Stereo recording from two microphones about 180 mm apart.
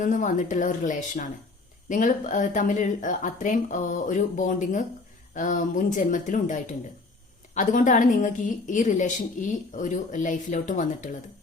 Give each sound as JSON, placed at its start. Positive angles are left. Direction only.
{"t": 0.0, "sound": "speech", "side_deg": 45}